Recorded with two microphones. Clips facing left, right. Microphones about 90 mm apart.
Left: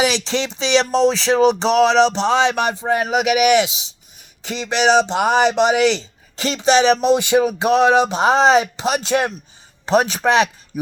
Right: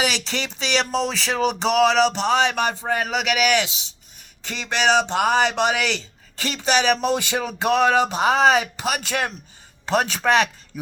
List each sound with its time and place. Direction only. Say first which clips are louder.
0.1 s speech: left 6 dB; 25° left (ahead or behind)
3.1 s speech: left 7 dB; 5° left (ahead or behind)